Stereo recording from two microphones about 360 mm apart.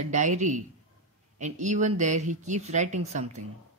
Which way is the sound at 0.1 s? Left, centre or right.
Centre.